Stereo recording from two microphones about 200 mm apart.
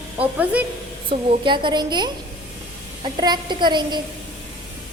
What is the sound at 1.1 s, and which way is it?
A woman's voice, 25° right (ahead or behind).